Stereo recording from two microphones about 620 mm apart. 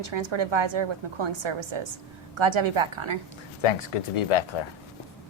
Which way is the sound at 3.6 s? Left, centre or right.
Left.